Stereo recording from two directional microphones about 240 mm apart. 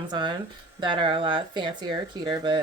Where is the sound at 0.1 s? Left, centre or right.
Centre.